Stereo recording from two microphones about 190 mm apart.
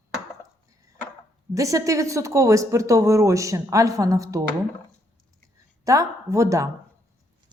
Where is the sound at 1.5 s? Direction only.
15° right (ahead or behind).